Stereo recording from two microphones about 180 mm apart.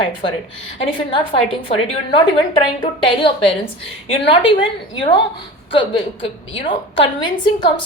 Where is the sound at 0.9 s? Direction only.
30° left (ahead or behind).